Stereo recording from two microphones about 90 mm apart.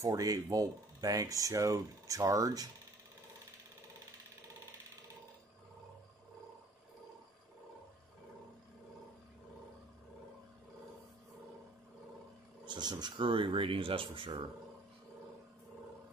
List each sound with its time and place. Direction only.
0.0 s speech: 40° right (ahead or behind)
12.6 s speech: 55° right (ahead or behind)
13.3 s speech: 75° right (ahead or behind)